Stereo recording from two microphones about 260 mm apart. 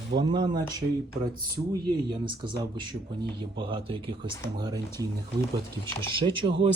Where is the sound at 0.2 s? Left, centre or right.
Centre.